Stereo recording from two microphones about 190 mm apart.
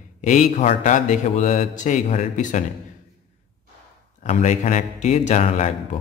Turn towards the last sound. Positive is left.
turn(degrees=35)  # may be behind; listen again after turning